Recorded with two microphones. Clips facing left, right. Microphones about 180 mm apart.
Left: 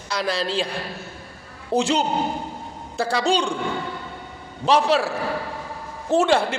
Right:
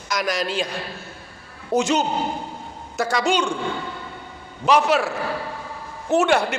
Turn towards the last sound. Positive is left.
turn(degrees=30)  # may be behind; listen again after turning